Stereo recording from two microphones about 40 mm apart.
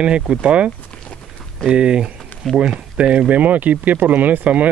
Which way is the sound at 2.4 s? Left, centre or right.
Centre.